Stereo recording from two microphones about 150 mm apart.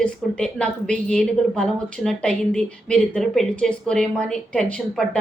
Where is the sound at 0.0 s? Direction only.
5° left (ahead or behind).